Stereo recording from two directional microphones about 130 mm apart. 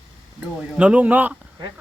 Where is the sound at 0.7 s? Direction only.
10° right (ahead or behind).